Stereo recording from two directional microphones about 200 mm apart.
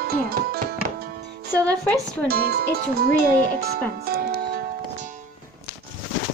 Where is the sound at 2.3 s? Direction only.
50° right (ahead or behind).